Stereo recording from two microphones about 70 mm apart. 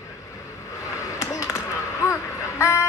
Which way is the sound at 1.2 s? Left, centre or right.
Left.